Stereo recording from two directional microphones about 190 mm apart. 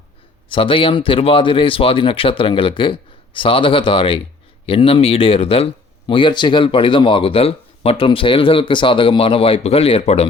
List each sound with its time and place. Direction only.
0.4 s speech: 30° left (ahead or behind)